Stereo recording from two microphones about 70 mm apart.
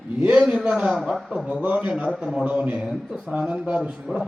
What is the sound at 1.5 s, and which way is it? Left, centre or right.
A man's voice, centre.